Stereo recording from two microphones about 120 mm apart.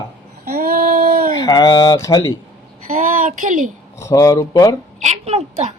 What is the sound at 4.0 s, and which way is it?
Speech, 25° left (ahead or behind).